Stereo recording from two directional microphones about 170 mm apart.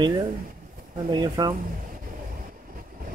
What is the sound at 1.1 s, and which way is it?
Speech, 25° right (ahead or behind).